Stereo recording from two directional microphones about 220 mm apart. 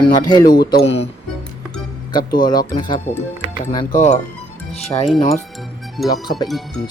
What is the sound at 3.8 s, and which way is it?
Speech, 35° left (ahead or behind).